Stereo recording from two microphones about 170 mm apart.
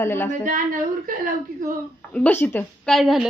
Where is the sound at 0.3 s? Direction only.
50° right (ahead or behind).